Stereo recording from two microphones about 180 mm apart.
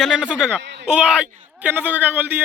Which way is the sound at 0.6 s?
75° right (ahead or behind).